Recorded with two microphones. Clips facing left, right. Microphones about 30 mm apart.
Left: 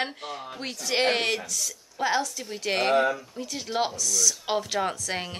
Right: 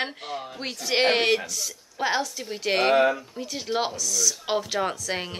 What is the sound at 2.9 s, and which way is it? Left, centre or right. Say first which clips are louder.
Speech: right 2 dB; right.